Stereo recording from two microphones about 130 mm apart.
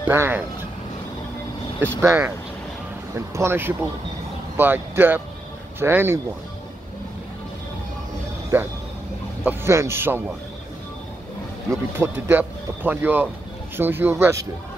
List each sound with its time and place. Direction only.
0.0 s speech: 15° right (ahead or behind)
1.8 s speech: 15° right (ahead or behind)
8.5 s speech: 15° right (ahead or behind)
11.7 s speech: 15° right (ahead or behind)